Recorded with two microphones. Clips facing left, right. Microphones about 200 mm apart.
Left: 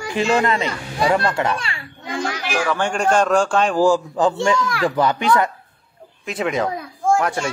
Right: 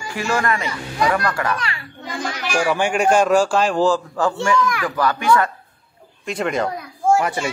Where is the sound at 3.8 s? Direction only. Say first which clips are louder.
Left 2 dB; 15° left (ahead or behind).